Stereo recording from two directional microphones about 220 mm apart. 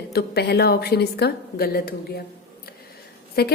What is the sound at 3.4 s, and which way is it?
Speech, 45° left (ahead or behind).